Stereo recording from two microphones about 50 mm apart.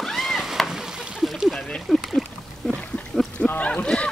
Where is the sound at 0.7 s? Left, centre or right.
Centre.